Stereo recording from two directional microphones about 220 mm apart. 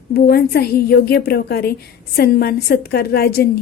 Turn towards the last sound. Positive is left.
turn(degrees=45)  # may be behind; listen again after turning